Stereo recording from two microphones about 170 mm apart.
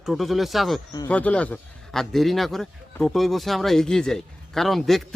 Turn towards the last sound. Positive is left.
turn(degrees=0)  # may be behind; listen again after turning